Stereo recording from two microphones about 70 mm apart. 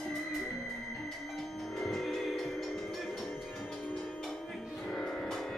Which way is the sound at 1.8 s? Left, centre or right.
Centre.